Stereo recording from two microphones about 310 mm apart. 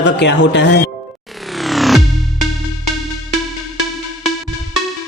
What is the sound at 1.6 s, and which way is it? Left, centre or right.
Music, centre.